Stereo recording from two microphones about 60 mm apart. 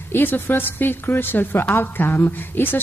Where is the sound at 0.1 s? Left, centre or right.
Left.